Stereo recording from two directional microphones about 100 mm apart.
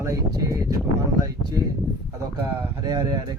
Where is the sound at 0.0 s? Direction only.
30° right (ahead or behind).